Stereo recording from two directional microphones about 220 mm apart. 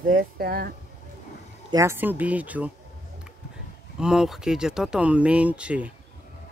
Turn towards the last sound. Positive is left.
turn(degrees=-5)  # may be behind; listen again after turning